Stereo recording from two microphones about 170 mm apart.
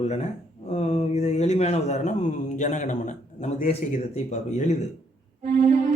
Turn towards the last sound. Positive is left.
turn(degrees=-45)  # may be behind; listen again after turning